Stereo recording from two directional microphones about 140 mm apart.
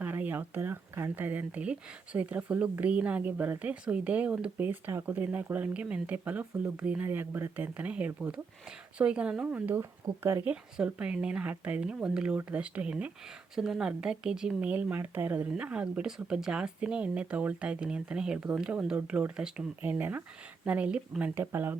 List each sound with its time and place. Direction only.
0.0 s speech: 10° right (ahead or behind)
10.5 s speech: 10° right (ahead or behind)